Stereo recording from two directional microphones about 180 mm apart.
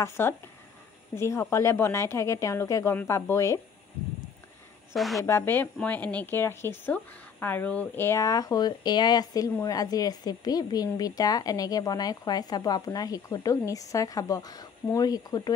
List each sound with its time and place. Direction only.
0.0 s a woman's voice: 15° left (ahead or behind)
4.9 s a woman's voice: centre (ahead or behind)
5.2 s speech: 15° left (ahead or behind)